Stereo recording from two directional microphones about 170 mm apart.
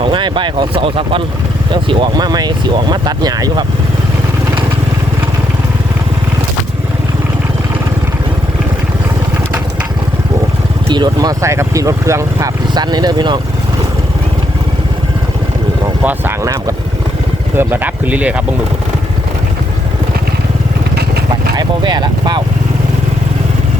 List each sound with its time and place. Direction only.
0.0 s speech: 30° right (ahead or behind)
10.9 s speech: 25° right (ahead or behind)
16.0 s speech: 15° right (ahead or behind)
21.5 s speech: 25° right (ahead or behind)